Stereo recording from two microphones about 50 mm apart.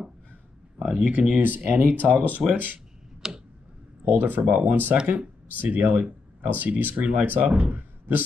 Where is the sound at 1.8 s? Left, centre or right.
Right.